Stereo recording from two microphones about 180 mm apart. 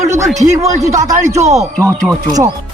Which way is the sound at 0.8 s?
20° right (ahead or behind).